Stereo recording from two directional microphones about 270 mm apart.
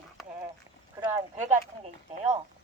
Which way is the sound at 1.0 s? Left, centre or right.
Centre.